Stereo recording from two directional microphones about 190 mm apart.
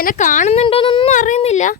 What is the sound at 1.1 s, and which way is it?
Speech, 40° left (ahead or behind).